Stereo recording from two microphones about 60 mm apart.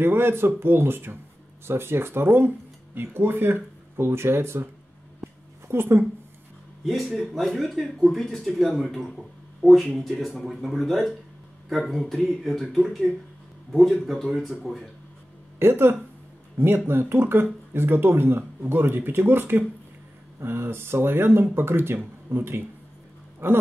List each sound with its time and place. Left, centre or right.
0.0 s speech: right
5.2 s a sound: right
6.8 s speech: centre
15.6 s speech: right